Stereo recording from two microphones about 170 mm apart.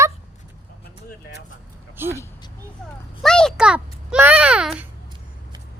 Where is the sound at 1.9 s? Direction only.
15° right (ahead or behind).